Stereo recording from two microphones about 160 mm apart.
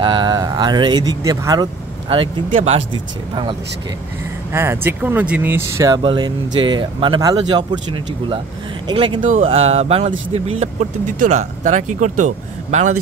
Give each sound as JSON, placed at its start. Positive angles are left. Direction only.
{"t": 0.0, "sound": "speech", "side_deg": -30}
{"t": 2.0, "sound": "speech", "side_deg": -35}
{"t": 4.5, "sound": "speech", "side_deg": -15}
{"t": 6.0, "sound": "speech", "side_deg": -30}